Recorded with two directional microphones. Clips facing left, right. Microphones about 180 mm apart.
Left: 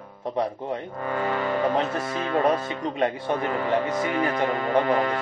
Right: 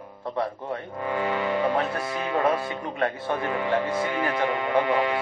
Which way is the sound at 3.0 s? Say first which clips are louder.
Left 2 dB; 20° left (ahead or behind).